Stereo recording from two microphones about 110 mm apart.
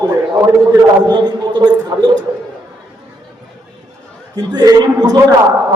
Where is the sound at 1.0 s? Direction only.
40° right (ahead or behind).